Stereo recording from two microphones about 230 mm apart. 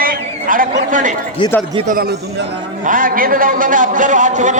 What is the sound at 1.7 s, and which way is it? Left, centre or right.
A man's voice, right.